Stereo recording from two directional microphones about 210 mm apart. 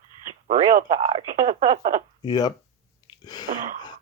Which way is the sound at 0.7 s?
40° right (ahead or behind).